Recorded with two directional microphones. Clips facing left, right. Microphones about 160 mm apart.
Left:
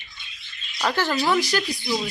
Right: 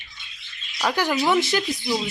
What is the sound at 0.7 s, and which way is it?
Speech, 10° right (ahead or behind).